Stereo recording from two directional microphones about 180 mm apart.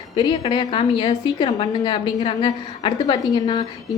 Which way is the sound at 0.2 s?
25° left (ahead or behind).